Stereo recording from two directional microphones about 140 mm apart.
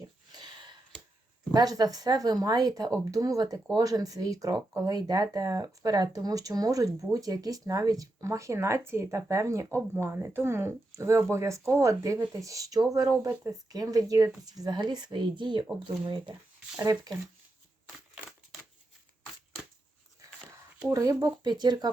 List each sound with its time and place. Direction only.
0.3 s a sound: 30° right (ahead or behind)
1.5 s speech: 25° right (ahead or behind)
16.7 s speech: 25° right (ahead or behind)
20.9 s speech: 25° right (ahead or behind)